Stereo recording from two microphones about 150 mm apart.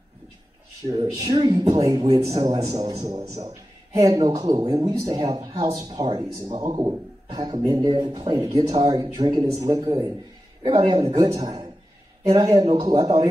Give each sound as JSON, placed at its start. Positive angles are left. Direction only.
{"t": 1.1, "sound": "a man's voice", "side_deg": -25}
{"t": 2.0, "sound": "a man's voice", "side_deg": -45}
{"t": 2.4, "sound": "a man's voice", "side_deg": -25}
{"t": 9.8, "sound": "a man's voice", "side_deg": -35}
{"t": 12.3, "sound": "a man's voice", "side_deg": -25}